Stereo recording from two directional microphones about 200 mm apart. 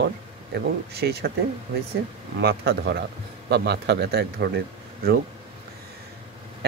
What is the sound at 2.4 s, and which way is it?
Speech, 55° right (ahead or behind).